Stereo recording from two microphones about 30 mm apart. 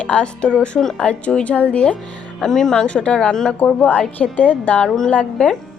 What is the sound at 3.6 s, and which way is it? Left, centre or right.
Speech, left.